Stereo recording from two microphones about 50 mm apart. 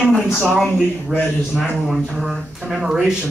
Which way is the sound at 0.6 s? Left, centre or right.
Centre.